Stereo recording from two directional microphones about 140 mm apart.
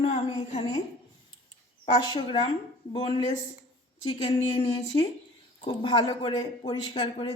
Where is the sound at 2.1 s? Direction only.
35° left (ahead or behind).